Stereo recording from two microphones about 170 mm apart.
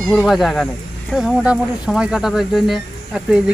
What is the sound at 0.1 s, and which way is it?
Speech, centre (ahead or behind).